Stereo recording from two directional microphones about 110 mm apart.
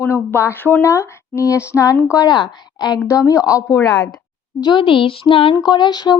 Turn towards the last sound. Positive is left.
turn(degrees=40)  # may be behind; listen again after turning